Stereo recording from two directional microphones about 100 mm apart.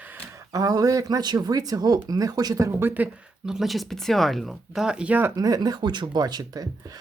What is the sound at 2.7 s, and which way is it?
Speech, 20° right (ahead or behind).